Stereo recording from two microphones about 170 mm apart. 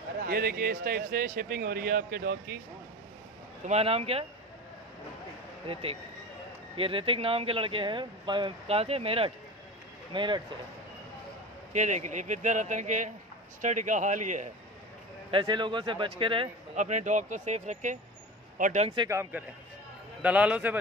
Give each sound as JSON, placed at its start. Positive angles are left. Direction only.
{"t": 0.3, "sound": "speech", "side_deg": -60}
{"t": 3.6, "sound": "speech", "side_deg": -35}
{"t": 5.7, "sound": "speech", "side_deg": -35}
{"t": 11.7, "sound": "speech", "side_deg": -45}
{"t": 15.3, "sound": "speech", "side_deg": -25}
{"t": 16.7, "sound": "speech", "side_deg": -45}
{"t": 18.9, "sound": "a man's voice", "side_deg": -15}